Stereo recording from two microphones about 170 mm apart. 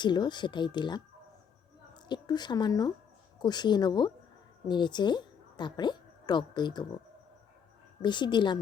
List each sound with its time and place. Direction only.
0.0 s a woman's voice: 25° left (ahead or behind)
8.0 s speech: 25° left (ahead or behind)